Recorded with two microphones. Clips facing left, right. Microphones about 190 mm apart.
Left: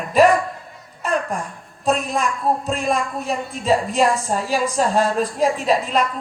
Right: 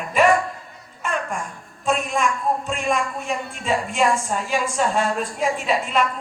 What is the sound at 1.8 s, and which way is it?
A woman's voice, 35° left (ahead or behind).